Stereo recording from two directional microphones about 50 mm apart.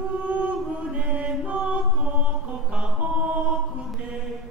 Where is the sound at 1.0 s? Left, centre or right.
Right.